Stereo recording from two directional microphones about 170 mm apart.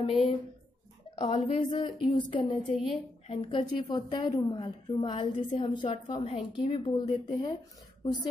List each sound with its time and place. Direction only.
0.0 s speech: 35° left (ahead or behind)
1.6 s a woman's voice: 25° left (ahead or behind)